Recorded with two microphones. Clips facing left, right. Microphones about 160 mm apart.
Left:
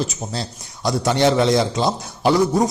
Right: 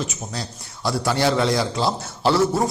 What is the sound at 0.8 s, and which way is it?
A man's voice, 20° left (ahead or behind).